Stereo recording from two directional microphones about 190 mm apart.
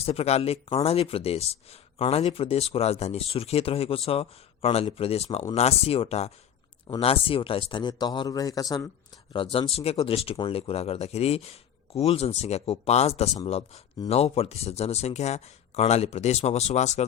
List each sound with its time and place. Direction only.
0.0 s speech: 30° left (ahead or behind)